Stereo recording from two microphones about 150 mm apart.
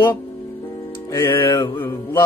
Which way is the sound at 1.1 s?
15° left (ahead or behind).